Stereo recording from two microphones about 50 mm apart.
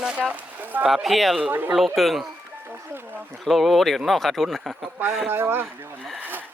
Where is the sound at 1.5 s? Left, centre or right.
Right.